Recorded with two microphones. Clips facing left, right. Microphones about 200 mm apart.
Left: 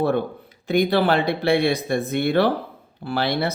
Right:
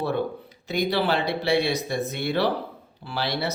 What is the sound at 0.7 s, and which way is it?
Speech, 55° left (ahead or behind).